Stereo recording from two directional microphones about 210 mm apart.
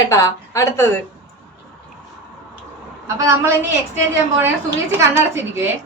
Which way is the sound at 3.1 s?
15° right (ahead or behind).